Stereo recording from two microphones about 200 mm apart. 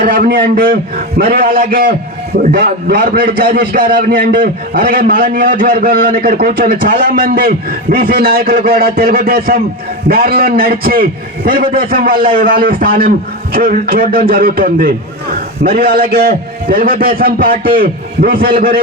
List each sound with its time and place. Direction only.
0.0 s a man's voice: 45° right (ahead or behind)